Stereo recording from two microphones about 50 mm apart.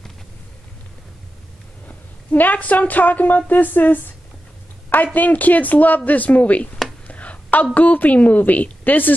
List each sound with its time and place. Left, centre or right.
1.9 s speech: left
5.0 s speech: left
7.1 s a sound: left
7.7 s speech: left